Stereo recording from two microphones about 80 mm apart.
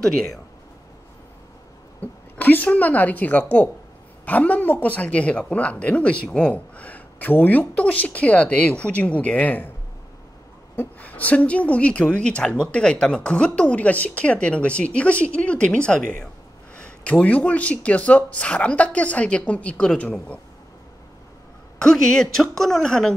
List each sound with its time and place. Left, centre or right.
0.0 s speech: centre
2.0 s a woman's voice: left
10.8 s a woman's voice: centre
21.7 s a woman's voice: centre